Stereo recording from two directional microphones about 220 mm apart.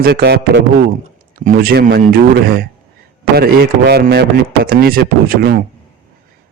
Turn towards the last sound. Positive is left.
turn(degrees=-40)  # may be behind; listen again after turning